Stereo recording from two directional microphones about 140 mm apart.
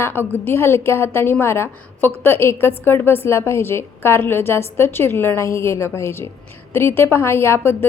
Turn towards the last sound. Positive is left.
turn(degrees=15)  # may be behind; listen again after turning